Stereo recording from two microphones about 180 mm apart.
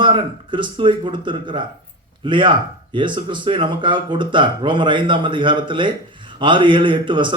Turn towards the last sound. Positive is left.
turn(degrees=-25)  # may be behind; listen again after turning